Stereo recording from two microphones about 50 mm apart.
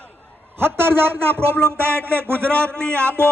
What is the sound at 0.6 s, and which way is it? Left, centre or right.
Speech, right.